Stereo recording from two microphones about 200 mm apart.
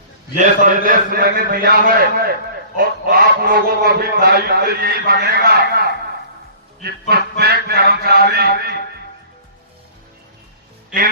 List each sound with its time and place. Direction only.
0.3 s fowl: 40° right (ahead or behind)
7.1 s fowl: 50° right (ahead or behind)